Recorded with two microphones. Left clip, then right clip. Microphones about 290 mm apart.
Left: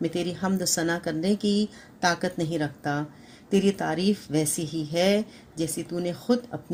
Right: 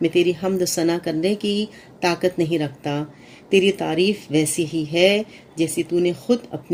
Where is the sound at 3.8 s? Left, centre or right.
Centre.